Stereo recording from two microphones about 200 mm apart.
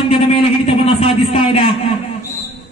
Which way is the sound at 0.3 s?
30° left (ahead or behind).